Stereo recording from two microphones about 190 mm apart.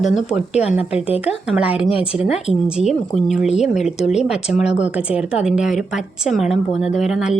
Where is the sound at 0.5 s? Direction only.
35° left (ahead or behind).